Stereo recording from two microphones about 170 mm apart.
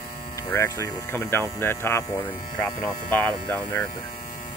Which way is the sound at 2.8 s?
10° left (ahead or behind).